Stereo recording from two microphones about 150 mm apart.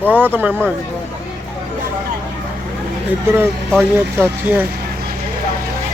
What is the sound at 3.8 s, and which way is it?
Speech, 10° right (ahead or behind).